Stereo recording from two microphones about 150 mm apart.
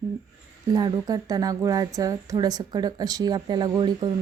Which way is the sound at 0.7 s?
25° right (ahead or behind).